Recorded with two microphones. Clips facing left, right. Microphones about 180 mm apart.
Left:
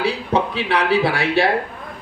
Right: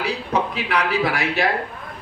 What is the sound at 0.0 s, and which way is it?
A man's voice, 30° left (ahead or behind).